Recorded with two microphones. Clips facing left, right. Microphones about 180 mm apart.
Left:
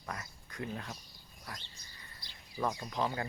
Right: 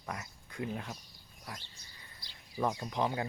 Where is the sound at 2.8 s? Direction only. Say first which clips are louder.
Right 2 dB; 15° right (ahead or behind).